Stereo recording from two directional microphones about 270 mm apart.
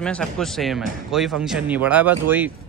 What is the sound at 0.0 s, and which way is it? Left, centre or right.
Speech, centre.